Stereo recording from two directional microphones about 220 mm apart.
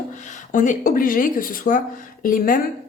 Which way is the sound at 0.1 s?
35° left (ahead or behind).